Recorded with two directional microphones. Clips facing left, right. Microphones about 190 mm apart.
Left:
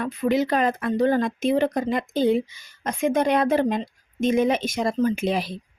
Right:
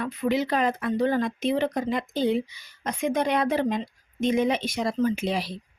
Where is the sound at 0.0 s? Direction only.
45° left (ahead or behind).